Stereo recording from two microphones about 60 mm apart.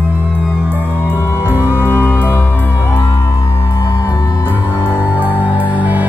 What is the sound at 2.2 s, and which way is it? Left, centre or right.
Music, left.